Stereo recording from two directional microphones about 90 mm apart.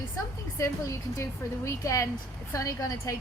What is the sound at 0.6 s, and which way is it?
A woman's voice, 35° left (ahead or behind).